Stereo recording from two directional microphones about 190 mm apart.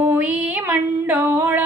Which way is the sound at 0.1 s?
10° right (ahead or behind).